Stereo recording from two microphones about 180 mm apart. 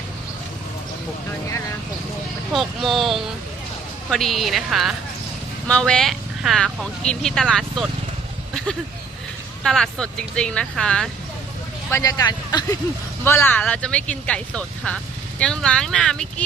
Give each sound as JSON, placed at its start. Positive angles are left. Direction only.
{"t": 2.5, "sound": "speech", "side_deg": 0}
{"t": 9.6, "sound": "speech", "side_deg": 5}
{"t": 11.9, "sound": "speech", "side_deg": 20}